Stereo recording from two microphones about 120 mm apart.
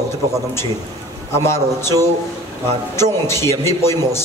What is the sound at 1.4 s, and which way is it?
A man's voice, 20° left (ahead or behind).